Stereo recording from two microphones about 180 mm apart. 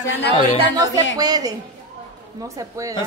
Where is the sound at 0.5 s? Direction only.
20° right (ahead or behind).